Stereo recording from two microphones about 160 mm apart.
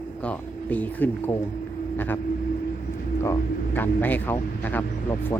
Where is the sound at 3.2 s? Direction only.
15° left (ahead or behind).